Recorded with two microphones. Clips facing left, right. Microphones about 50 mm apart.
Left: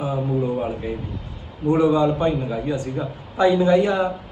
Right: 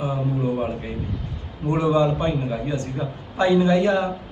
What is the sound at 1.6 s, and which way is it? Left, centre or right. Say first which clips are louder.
A man's voice: left 2 dB; centre.